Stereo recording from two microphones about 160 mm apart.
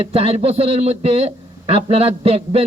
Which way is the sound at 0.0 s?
35° right (ahead or behind).